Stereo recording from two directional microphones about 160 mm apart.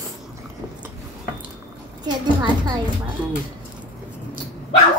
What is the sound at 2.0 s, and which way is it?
Speech, 25° right (ahead or behind).